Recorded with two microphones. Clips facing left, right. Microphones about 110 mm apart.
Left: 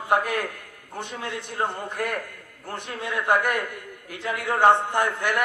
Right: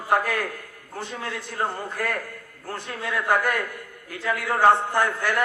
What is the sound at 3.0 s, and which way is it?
A man's voice, 20° left (ahead or behind).